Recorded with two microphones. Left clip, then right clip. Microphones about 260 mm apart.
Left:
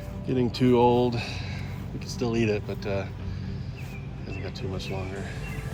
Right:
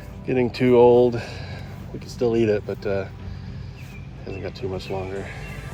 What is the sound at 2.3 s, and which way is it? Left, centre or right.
Speech, right.